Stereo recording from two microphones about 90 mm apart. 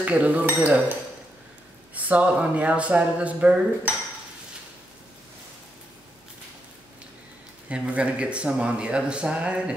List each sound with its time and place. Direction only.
0.0 s speech: 15° right (ahead or behind)
2.0 s speech: 15° right (ahead or behind)
7.7 s speech: 15° right (ahead or behind)